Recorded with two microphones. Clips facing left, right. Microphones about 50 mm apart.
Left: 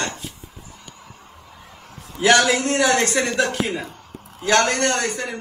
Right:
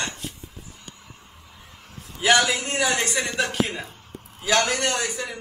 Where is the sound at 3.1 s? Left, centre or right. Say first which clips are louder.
Left 5 dB; left.